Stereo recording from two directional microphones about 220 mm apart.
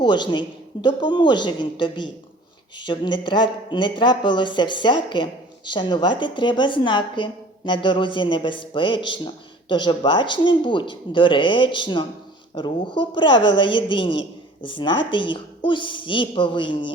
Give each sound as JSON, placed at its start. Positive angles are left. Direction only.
{"t": 0.0, "sound": "speech", "side_deg": 20}